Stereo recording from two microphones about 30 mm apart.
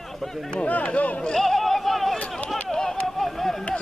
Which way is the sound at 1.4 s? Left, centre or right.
Centre.